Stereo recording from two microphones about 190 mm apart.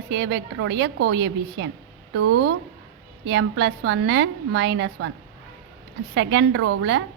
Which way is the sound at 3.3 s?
70° right (ahead or behind).